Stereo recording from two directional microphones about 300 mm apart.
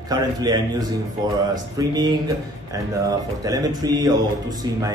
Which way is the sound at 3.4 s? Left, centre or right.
Centre.